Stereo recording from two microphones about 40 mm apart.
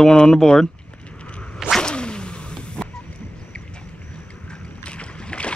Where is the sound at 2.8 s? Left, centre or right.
Centre.